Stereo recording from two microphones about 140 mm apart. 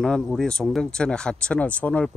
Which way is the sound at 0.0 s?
5° left (ahead or behind).